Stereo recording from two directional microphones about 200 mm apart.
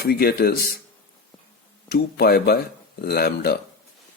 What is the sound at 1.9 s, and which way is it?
A man's voice, 50° left (ahead or behind).